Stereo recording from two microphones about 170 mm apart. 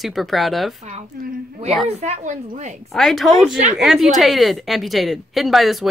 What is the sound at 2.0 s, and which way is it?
Speech, 45° right (ahead or behind).